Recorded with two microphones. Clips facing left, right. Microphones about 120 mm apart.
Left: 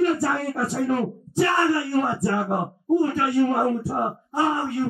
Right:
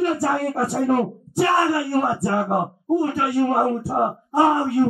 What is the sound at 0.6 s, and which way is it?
Speech, 55° right (ahead or behind).